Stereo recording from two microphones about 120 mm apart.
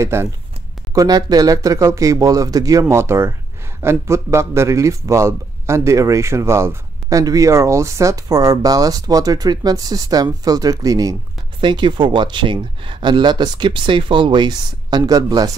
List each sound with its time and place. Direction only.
0.0 s a man's voice: 20° right (ahead or behind)
0.9 s a man's voice: 35° right (ahead or behind)
11.6 s speech: 40° right (ahead or behind)